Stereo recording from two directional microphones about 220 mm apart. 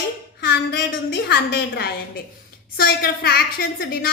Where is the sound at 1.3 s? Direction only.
45° left (ahead or behind).